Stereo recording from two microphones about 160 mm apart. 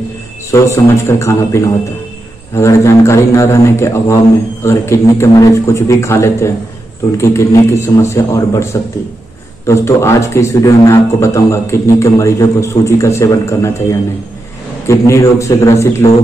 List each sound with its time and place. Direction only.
0.5 s a man's voice: 15° left (ahead or behind)
9.7 s a man's voice: 15° left (ahead or behind)